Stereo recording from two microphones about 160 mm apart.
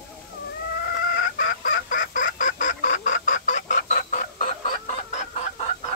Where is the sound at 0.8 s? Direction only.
65° left (ahead or behind).